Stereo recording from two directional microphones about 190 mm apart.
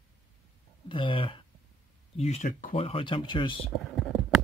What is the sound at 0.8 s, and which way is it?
Speech, 25° left (ahead or behind).